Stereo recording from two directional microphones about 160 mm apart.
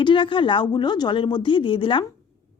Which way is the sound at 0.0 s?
30° left (ahead or behind).